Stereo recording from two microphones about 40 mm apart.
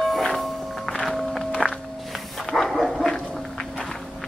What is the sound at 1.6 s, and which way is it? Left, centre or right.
Walk, centre.